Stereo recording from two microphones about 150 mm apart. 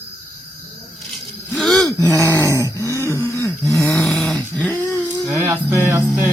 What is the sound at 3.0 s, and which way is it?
Throat clearing, 20° left (ahead or behind).